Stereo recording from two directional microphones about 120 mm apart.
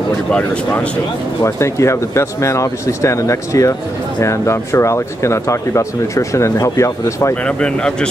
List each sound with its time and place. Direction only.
0.3 s speech: 10° left (ahead or behind)
1.4 s speech: 25° left (ahead or behind)
7.4 s speech: 10° left (ahead or behind)